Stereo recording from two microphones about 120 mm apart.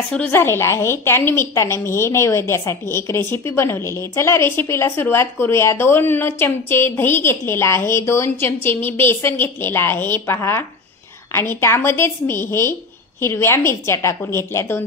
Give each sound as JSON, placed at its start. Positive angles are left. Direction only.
{"t": 0.1, "sound": "a woman's voice", "side_deg": 15}